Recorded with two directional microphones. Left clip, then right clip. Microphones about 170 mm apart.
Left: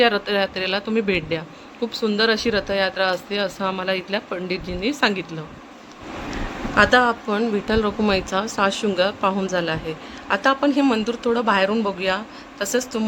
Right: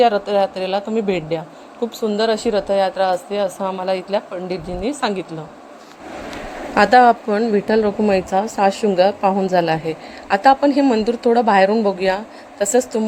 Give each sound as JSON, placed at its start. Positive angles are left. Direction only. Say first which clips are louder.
{"t": 0.3, "sound": "speech", "louder": "right 4 dB", "side_deg": 0}
{"t": 6.7, "sound": "a woman's voice", "louder": "right 5 dB", "side_deg": -30}